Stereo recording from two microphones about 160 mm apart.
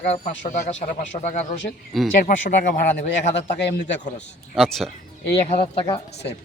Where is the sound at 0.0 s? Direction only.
45° left (ahead or behind).